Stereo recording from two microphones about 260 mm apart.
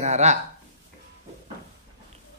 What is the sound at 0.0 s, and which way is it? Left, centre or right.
Speech, right.